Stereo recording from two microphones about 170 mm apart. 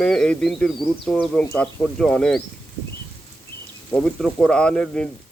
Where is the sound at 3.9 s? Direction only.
5° left (ahead or behind).